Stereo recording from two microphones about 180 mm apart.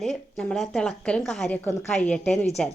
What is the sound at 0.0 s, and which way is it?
A woman's voice, centre (ahead or behind).